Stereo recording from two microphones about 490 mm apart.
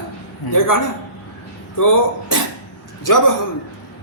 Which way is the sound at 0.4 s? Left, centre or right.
Left.